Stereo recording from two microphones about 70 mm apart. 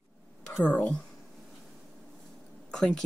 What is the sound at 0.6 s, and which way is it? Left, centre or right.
Speech, centre.